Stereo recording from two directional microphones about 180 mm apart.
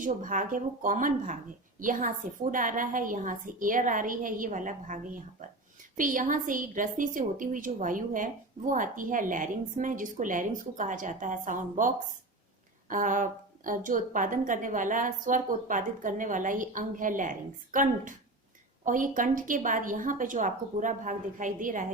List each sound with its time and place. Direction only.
0.0 s a woman's voice: 45° right (ahead or behind)